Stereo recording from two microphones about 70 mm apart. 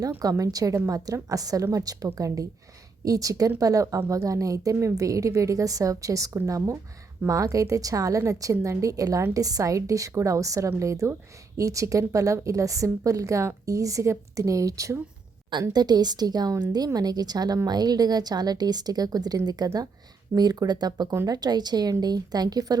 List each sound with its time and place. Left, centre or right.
0.2 s a woman's voice: right
15.7 s a woman's voice: right